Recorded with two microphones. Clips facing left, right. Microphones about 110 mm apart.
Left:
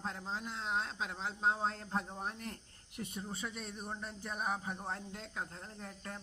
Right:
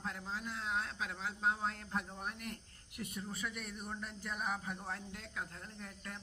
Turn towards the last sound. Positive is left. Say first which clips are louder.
# left 2 dB
turn(degrees=30)  # may be behind; listen again after turning